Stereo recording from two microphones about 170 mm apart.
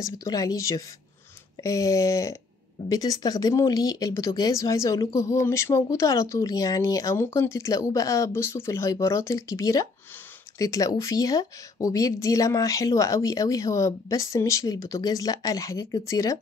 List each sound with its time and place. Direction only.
0.0 s speech: 20° left (ahead or behind)